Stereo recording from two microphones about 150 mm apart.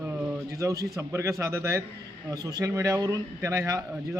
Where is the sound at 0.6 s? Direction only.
20° right (ahead or behind).